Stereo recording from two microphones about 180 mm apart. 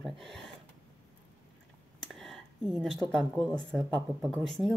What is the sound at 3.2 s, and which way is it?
Speech, 5° left (ahead or behind).